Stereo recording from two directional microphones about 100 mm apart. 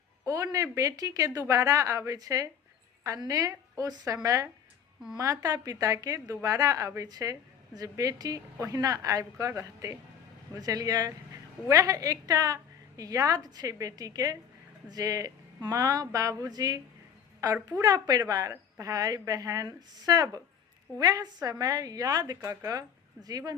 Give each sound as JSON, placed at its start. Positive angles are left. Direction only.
{"t": 0.3, "sound": "a woman's voice", "side_deg": -35}